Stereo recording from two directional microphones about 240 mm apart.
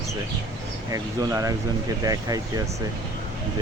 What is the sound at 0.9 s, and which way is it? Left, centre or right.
Speech, centre.